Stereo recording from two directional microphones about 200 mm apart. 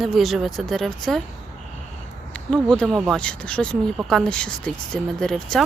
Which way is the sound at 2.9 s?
5° right (ahead or behind).